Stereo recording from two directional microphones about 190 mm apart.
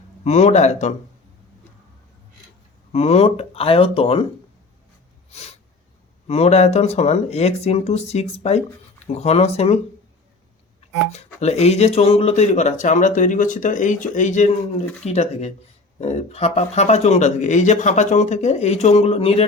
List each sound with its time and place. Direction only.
0.3 s speech: 35° left (ahead or behind)
2.9 s speech: 35° left (ahead or behind)
6.2 s speech: 35° left (ahead or behind)
11.3 s speech: 35° left (ahead or behind)